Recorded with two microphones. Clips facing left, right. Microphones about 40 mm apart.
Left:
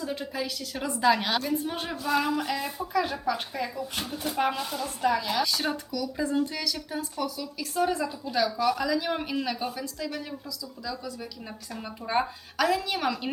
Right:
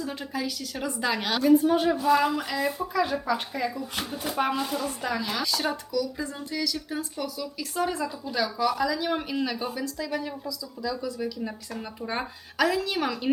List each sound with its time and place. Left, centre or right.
0.0 s a woman's voice: centre